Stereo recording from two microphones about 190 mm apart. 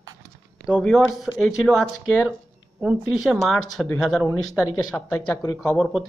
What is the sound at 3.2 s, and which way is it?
Speech, centre (ahead or behind).